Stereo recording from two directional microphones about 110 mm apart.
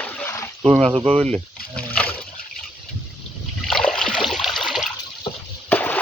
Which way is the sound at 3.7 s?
5° left (ahead or behind).